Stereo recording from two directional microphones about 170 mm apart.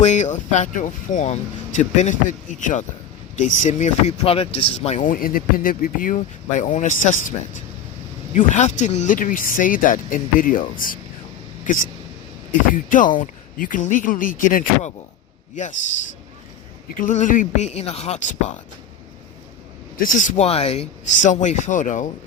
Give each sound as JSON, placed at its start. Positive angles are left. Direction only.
{"t": 0.0, "sound": "speech", "side_deg": 45}
{"t": 16.9, "sound": "speech", "side_deg": 50}
{"t": 20.0, "sound": "speech", "side_deg": 50}